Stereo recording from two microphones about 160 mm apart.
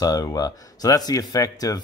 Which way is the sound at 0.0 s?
25° left (ahead or behind).